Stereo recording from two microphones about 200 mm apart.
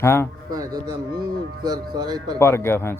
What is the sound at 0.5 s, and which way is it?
Speech, 20° right (ahead or behind).